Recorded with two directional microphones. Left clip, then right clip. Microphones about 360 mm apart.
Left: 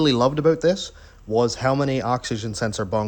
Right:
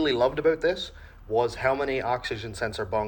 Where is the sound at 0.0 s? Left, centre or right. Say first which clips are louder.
Left 4 dB; left.